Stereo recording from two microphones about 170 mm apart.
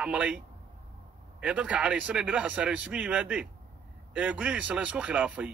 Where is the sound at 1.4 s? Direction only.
5° right (ahead or behind).